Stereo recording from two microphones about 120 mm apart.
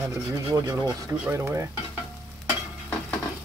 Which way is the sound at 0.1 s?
30° right (ahead or behind).